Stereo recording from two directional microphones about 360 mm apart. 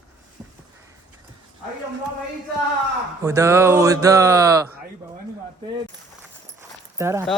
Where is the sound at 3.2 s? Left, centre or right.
Centre.